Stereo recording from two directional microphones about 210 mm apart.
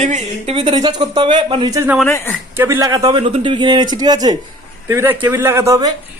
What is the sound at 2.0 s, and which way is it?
Speech, 10° left (ahead or behind).